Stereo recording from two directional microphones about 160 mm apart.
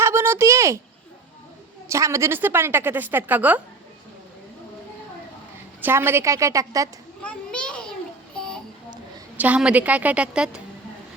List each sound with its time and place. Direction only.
0.0 s speech: 15° right (ahead or behind)
1.9 s a woman's voice: 20° right (ahead or behind)
5.8 s a woman's voice: 15° right (ahead or behind)
7.2 s children playing: 5° left (ahead or behind)
9.4 s a woman's voice: 5° right (ahead or behind)